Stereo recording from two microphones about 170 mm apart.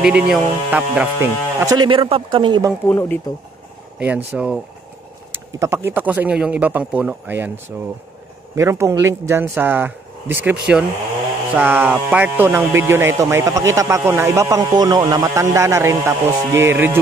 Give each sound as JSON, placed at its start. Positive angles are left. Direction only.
{"t": 0.0, "sound": "speech", "side_deg": -5}
{"t": 1.9, "sound": "speech", "side_deg": -30}
{"t": 2.9, "sound": "speech", "side_deg": 10}
{"t": 4.0, "sound": "speech", "side_deg": -10}